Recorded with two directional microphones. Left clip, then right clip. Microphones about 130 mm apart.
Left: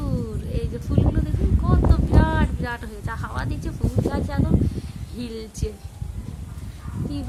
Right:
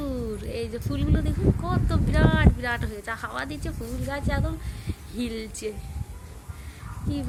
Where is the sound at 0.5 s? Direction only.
30° right (ahead or behind).